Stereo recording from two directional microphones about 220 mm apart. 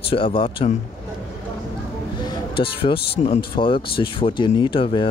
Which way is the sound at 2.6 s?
25° left (ahead or behind).